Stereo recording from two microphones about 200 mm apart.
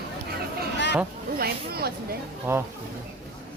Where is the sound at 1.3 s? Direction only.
50° right (ahead or behind).